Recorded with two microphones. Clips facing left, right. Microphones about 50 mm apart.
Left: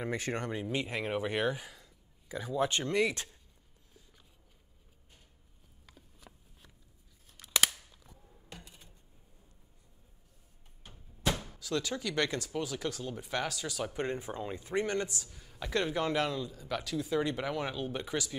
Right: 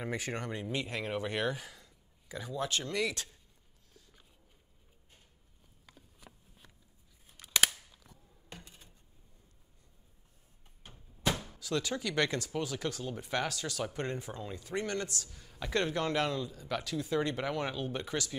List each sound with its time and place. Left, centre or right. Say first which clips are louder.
0.0 s speech: left 2 dB; centre
0.5 s speech: left 2 dB; centre
5.9 s a sound: even; centre
7.2 s scissors: right 1 dB; centre
11.4 s speech: even; centre